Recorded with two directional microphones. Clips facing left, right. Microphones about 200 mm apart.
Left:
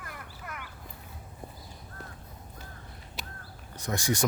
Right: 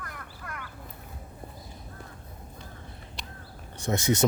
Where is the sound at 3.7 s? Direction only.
25° right (ahead or behind).